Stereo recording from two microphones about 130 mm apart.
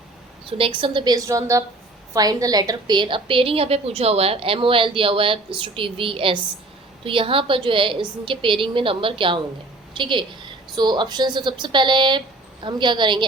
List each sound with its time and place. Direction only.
0.4 s a woman's voice: 45° right (ahead or behind)